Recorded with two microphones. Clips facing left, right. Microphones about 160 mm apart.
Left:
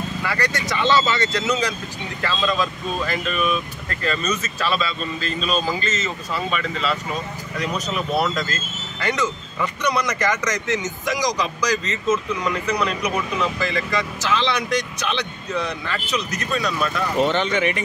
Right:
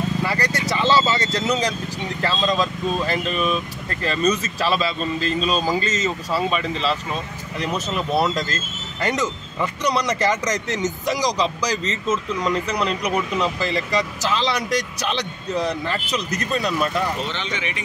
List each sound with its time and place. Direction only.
0.2 s vehicle: 30° right (ahead or behind)
2.2 s speech: 35° right (ahead or behind)
17.2 s speech: 50° left (ahead or behind)